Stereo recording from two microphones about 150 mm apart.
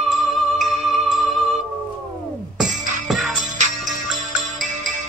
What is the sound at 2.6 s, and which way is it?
Music, 5° right (ahead or behind).